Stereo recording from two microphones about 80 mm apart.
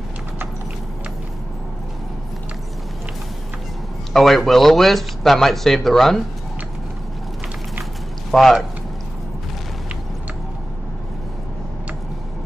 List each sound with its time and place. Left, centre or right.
4.1 s a man's voice: centre
8.3 s speech: centre